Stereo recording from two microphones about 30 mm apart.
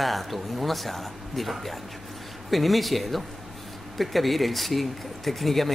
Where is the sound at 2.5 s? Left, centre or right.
Centre.